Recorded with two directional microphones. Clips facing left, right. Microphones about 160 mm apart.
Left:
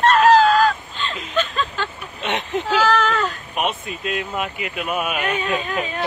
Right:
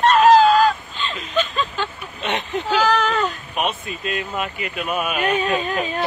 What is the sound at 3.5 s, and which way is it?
Speech, centre (ahead or behind).